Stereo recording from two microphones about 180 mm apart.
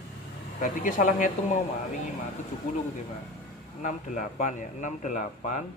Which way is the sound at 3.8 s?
45° left (ahead or behind).